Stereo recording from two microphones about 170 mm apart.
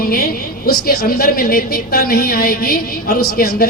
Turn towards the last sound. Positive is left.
turn(degrees=60)  # may be behind; listen again after turning